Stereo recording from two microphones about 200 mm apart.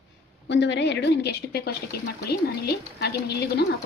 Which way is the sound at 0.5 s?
60° left (ahead or behind).